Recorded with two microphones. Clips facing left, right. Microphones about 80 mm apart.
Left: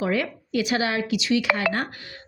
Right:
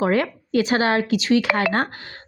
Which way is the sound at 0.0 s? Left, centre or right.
Right.